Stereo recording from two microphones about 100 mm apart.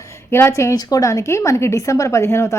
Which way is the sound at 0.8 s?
40° left (ahead or behind).